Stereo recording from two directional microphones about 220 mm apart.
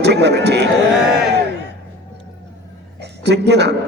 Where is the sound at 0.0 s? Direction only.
50° right (ahead or behind).